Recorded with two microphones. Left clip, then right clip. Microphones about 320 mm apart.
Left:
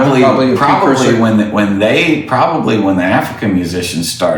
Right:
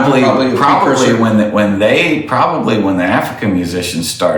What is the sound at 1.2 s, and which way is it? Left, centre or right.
A man's voice, centre.